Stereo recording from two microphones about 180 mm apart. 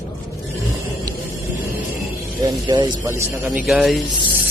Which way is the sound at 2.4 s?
20° right (ahead or behind).